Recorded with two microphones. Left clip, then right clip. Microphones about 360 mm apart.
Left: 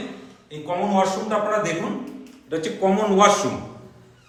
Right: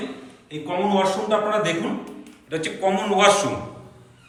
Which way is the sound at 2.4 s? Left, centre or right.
Centre.